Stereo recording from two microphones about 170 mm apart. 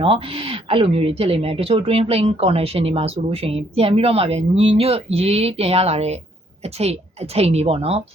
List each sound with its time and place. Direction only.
0.0 s speech: 30° right (ahead or behind)